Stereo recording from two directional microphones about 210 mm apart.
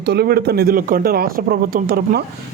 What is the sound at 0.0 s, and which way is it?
Speech, 50° right (ahead or behind).